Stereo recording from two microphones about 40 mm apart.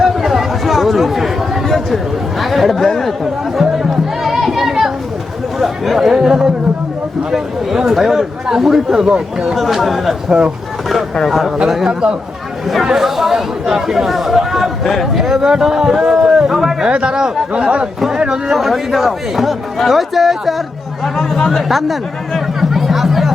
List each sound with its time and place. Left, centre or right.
0.0 s chatter: centre
2.4 s a man's voice: centre
3.6 s music: centre
5.5 s a man's voice: centre
6.1 s speech: centre
9.6 s a man's voice: centre
11.3 s a man's voice: centre
12.8 s speech: centre
16.8 s speech: right
18.1 s a sound: centre
18.5 s a man's voice: centre
22.7 s music: centre